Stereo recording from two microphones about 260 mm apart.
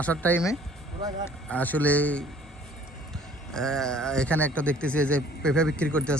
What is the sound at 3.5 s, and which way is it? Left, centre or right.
Speech, centre.